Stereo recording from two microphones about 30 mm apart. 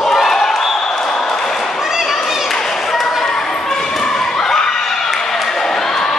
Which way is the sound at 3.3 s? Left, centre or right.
Centre.